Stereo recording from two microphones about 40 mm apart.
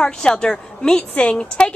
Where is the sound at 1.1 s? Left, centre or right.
Left.